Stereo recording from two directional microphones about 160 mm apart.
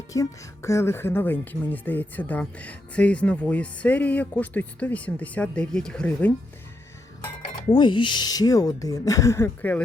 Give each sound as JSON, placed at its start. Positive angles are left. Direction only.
{"t": 0.1, "sound": "speech", "side_deg": 20}
{"t": 7.7, "sound": "speech", "side_deg": 30}